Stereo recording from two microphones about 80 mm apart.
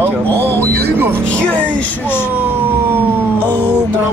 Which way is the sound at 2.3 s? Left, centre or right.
Right.